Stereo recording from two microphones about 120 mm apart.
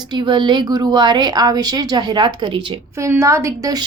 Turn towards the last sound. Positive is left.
turn(degrees=-30)  # may be behind; listen again after turning